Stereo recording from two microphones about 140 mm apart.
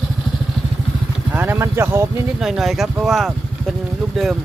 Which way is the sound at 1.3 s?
15° right (ahead or behind).